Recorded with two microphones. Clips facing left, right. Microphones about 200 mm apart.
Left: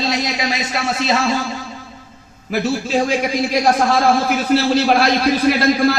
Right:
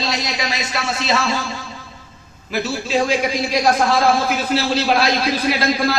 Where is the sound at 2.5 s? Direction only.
50° left (ahead or behind).